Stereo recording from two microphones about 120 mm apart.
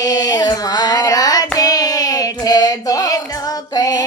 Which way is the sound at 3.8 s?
30° left (ahead or behind).